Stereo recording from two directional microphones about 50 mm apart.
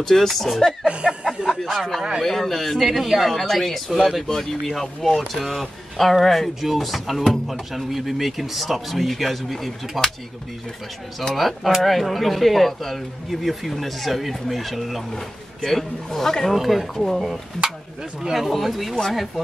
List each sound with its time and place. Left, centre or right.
0.0 s speech: centre
1.0 s a sound: centre
1.6 s speech: centre
11.3 s speech: centre